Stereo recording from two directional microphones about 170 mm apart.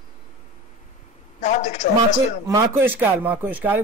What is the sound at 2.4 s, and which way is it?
Speech, 15° right (ahead or behind).